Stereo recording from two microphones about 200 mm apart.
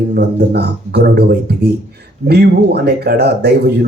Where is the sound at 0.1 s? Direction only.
50° right (ahead or behind).